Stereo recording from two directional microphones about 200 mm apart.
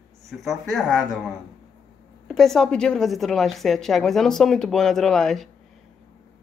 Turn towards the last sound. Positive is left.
turn(degrees=0)  # may be behind; listen again after turning